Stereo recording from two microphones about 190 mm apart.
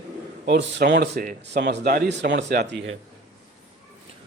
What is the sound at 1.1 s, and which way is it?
Speech, 45° right (ahead or behind).